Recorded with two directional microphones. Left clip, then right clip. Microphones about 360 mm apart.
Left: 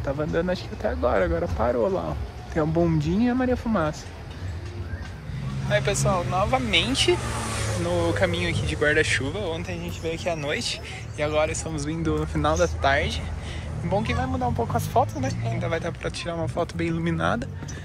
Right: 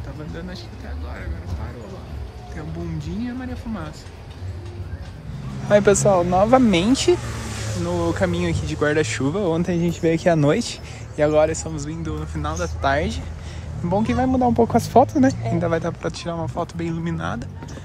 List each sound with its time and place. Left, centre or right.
0.3 s speech: centre
2.5 s speech: centre
5.7 s speech: right
14.1 s speech: right; by 17.5 s centre